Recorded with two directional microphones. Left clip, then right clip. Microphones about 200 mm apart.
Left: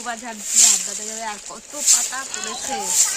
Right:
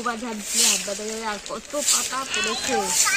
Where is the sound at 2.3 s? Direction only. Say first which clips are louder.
Right 5 dB; 30° left (ahead or behind).